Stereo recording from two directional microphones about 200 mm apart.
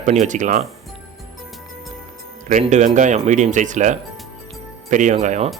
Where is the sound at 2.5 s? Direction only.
35° right (ahead or behind).